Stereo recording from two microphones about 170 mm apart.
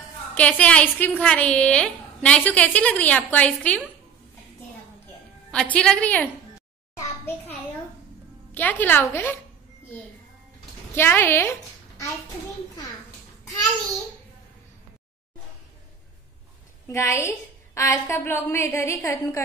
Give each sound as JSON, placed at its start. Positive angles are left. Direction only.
{"t": 0.3, "sound": "a woman's voice", "side_deg": 10}
{"t": 5.5, "sound": "a woman's voice", "side_deg": 5}
{"t": 7.0, "sound": "a sound", "side_deg": 15}
{"t": 8.5, "sound": "a woman's voice", "side_deg": 10}
{"t": 11.0, "sound": "a woman's voice", "side_deg": 15}
{"t": 16.8, "sound": "a woman's voice", "side_deg": 15}